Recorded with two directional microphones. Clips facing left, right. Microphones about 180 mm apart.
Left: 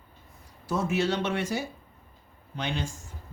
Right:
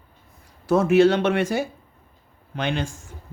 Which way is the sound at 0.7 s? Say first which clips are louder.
Right 11 dB; 60° right (ahead or behind).